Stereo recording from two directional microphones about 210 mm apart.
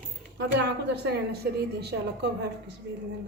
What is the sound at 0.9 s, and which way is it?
A woman's voice, 50° right (ahead or behind).